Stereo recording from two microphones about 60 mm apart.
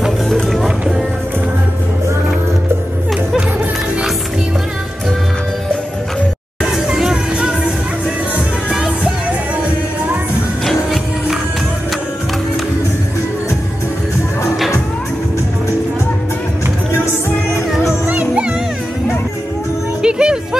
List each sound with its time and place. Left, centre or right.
0.3 s music: centre
6.6 s music: centre
8.6 s music: centre
10.6 s music: centre
17.6 s music: centre
18.0 s music: right
20.0 s music: centre